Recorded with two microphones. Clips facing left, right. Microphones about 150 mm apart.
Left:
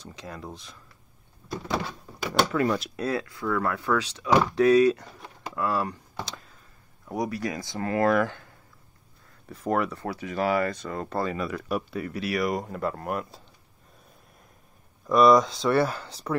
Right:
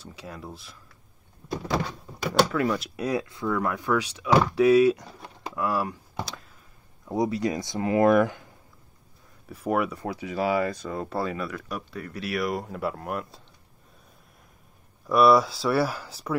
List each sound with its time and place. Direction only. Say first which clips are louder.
0.0 s speech: left 1 dB; 5° right (ahead or behind)
1.9 s speech: right 2 dB; centre (ahead or behind)
3.0 s speech: right 1 dB; 15° right (ahead or behind)
7.1 s speech: right 4 dB; 20° right (ahead or behind)
9.5 s speech: even; 10° right (ahead or behind)
15.0 s speech: left 1 dB; 5° right (ahead or behind)